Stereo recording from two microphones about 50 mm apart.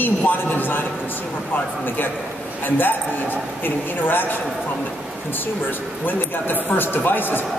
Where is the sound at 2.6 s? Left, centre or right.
Left.